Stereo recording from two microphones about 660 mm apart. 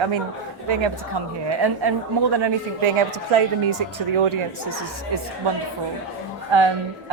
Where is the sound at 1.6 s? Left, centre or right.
Right.